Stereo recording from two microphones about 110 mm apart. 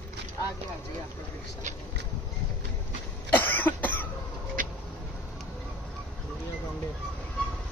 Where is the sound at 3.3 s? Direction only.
15° left (ahead or behind).